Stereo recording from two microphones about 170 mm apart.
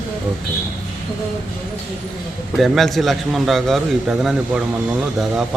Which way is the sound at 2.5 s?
Centre (ahead or behind).